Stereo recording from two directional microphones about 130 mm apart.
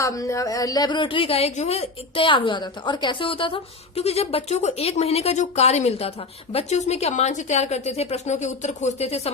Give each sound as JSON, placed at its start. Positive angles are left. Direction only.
{"t": 0.0, "sound": "a woman's voice", "side_deg": 25}